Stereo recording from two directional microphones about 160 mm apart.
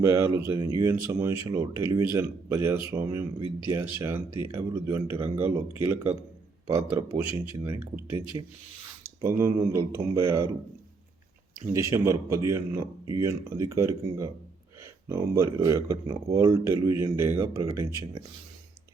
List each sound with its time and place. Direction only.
0.0 s speech: 20° right (ahead or behind)
11.7 s speech: 20° right (ahead or behind)